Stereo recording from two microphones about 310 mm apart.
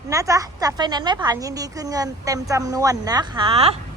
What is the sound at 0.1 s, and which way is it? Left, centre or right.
A woman's voice, centre.